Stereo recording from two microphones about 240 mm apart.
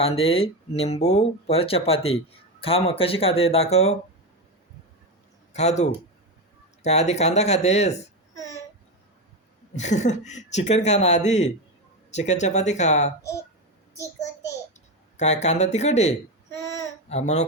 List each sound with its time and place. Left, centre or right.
0.0 s speech: left
5.5 s speech: left
9.7 s speech: left
15.2 s speech: left